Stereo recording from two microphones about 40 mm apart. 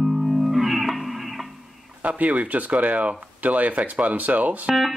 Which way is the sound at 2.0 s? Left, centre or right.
Right.